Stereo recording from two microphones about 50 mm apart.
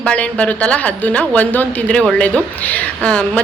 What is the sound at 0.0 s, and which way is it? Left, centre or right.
A woman's voice, left.